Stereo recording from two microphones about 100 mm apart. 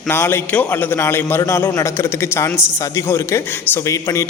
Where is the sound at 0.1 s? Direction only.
25° left (ahead or behind).